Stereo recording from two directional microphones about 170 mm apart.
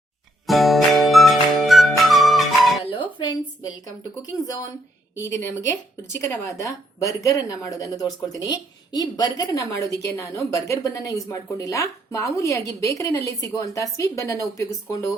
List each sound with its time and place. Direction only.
0.4 s music: centre (ahead or behind)
2.9 s a sound: 25° left (ahead or behind)
4.2 s a woman's voice: 20° left (ahead or behind)
6.4 s a woman's voice: 20° left (ahead or behind)